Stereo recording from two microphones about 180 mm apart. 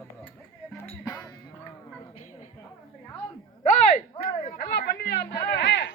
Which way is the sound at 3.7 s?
40° left (ahead or behind).